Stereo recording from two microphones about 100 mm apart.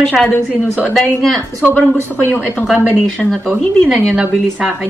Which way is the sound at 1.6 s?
20° left (ahead or behind).